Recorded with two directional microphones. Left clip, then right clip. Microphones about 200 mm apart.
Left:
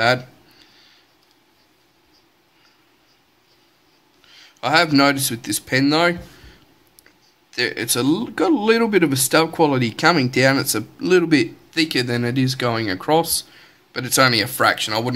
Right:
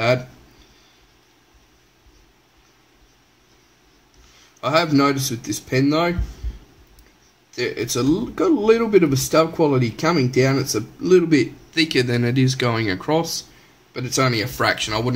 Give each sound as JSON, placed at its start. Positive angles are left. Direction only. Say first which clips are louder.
{"t": 4.6, "sound": "speech", "louder": "left 2 dB", "side_deg": 25}
{"t": 7.5, "sound": "speech", "louder": "left 2 dB", "side_deg": 25}